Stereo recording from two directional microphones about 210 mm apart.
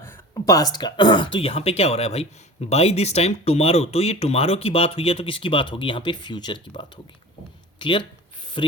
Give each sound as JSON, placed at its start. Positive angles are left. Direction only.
{"t": 0.0, "sound": "speech", "side_deg": 15}